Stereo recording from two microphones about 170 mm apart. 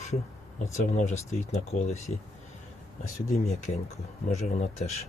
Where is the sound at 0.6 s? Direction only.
45° left (ahead or behind).